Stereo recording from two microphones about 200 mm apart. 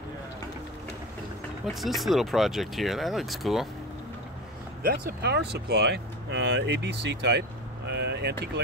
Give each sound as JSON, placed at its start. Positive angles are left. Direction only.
{"t": 1.7, "sound": "speech", "side_deg": 0}
{"t": 4.8, "sound": "speech", "side_deg": -55}